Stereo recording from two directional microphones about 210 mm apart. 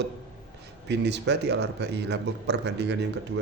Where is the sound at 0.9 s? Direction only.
55° right (ahead or behind).